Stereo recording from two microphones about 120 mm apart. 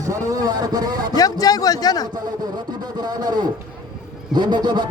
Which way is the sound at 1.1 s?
30° left (ahead or behind).